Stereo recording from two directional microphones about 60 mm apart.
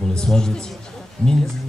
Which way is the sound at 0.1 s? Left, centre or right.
Centre.